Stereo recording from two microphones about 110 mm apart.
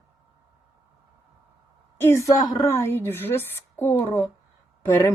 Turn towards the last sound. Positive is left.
turn(degrees=25)  # may be behind; listen again after turning